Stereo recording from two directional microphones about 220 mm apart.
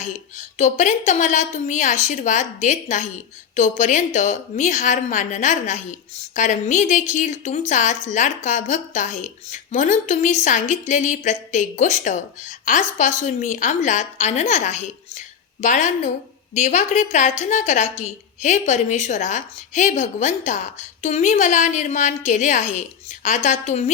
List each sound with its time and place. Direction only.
0.0 s speech: 35° left (ahead or behind)